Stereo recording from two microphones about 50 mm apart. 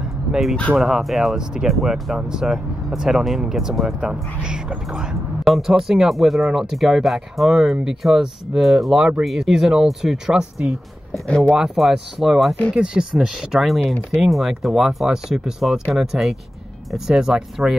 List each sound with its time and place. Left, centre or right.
0.7 s speech: centre
2.1 s speech: centre
5.5 s speech: centre
12.7 s speech: centre
13.2 s speech: centre
17.6 s speech: centre